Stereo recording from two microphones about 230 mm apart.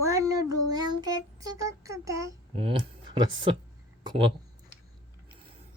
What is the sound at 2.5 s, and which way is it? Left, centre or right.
Speech, right.